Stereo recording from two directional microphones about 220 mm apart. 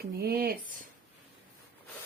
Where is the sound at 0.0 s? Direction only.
45° right (ahead or behind).